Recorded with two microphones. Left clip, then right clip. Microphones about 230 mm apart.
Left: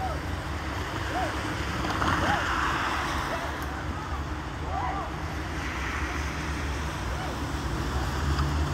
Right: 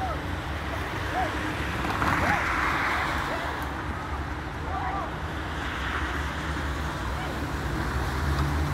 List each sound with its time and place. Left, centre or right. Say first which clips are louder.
1.9 s boat: right 1 dB; right